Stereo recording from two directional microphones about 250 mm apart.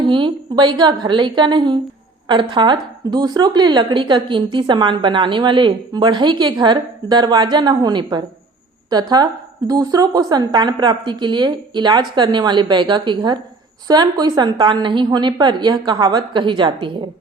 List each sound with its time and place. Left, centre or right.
0.0 s a woman's voice: centre